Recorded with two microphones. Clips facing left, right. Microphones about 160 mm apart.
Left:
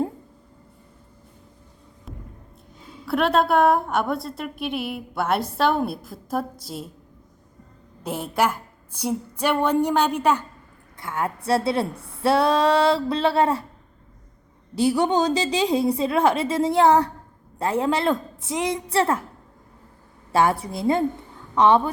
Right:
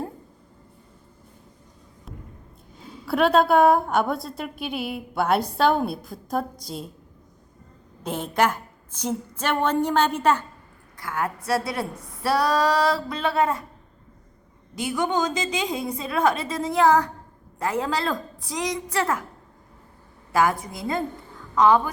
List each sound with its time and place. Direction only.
2.1 s a sound: centre (ahead or behind)
3.1 s a woman's voice: centre (ahead or behind)
8.0 s a woman's voice: 5° left (ahead or behind)
10.9 s a woman's voice: 25° left (ahead or behind)
14.8 s a woman's voice: 35° left (ahead or behind)
20.3 s a woman's voice: 30° left (ahead or behind)